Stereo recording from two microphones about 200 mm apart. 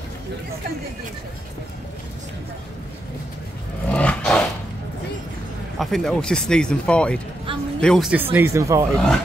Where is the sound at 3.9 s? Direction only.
5° left (ahead or behind).